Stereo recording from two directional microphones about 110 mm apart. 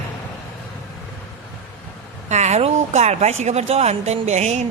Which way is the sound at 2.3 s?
90° right.